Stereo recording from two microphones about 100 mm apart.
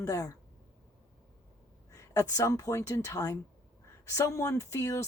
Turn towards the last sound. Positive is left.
turn(degrees=30)  # may be behind; listen again after turning